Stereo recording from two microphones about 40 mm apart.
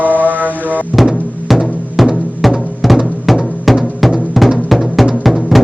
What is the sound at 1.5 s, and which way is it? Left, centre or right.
Music, centre.